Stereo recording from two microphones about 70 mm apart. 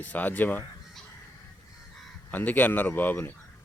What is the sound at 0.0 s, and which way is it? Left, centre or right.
Speech, left.